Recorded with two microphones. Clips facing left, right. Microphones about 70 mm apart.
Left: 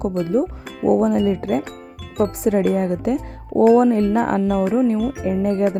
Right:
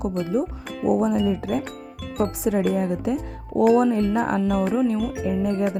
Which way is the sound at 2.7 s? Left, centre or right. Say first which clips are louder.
Left 4 dB; left.